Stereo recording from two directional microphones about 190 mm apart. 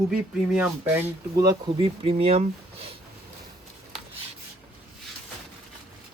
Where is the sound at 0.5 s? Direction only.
10° right (ahead or behind); by 3.0 s 30° right (ahead or behind).